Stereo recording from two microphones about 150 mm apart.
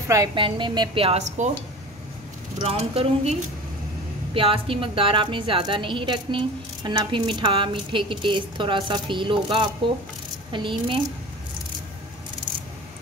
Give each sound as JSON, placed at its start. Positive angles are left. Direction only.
{"t": 0.1, "sound": "a woman's voice", "side_deg": -30}
{"t": 2.6, "sound": "a woman's voice", "side_deg": -40}